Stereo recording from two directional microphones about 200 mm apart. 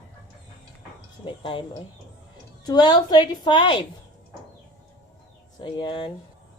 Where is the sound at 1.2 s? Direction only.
25° left (ahead or behind).